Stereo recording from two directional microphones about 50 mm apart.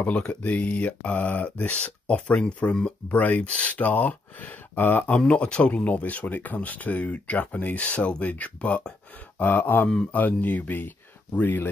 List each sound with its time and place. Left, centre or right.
0.3 s speech: left
5.2 s speech: left